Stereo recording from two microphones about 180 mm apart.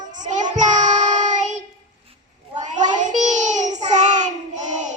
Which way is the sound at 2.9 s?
45° right (ahead or behind).